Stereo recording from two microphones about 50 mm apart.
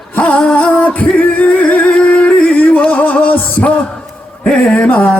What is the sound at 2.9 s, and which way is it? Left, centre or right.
Music, left.